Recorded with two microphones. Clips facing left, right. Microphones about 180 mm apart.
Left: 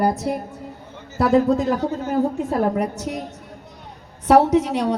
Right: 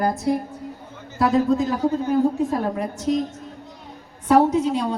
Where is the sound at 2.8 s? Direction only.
70° left (ahead or behind).